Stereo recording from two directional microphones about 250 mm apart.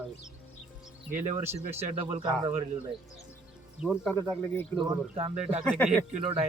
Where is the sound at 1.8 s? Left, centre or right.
Right.